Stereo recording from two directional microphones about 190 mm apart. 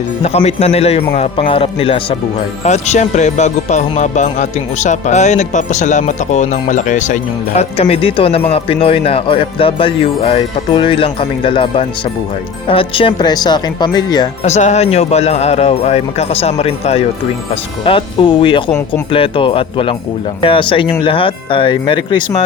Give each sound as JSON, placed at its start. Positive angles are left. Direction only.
{"t": 0.2, "sound": "speech", "side_deg": 35}
{"t": 14.4, "sound": "speech", "side_deg": 35}